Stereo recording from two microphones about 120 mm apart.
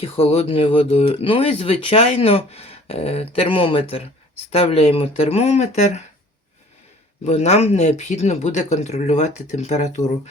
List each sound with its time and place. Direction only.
0.0 s speech: 55° left (ahead or behind)
7.3 s speech: 65° left (ahead or behind)